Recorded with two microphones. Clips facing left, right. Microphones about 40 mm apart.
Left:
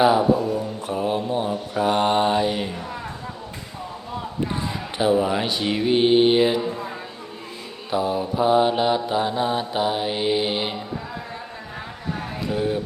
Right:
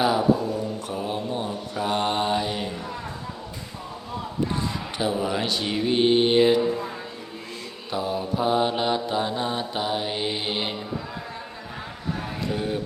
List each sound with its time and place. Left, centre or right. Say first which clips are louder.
0.0 s speech: left 5 dB; centre
0.5 s mantra: left 3 dB; centre
4.5 s mantra: left 2 dB; centre
12.5 s speech: left 4 dB; centre